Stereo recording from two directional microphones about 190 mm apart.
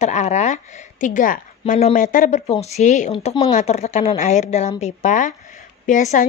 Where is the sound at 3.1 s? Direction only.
30° left (ahead or behind).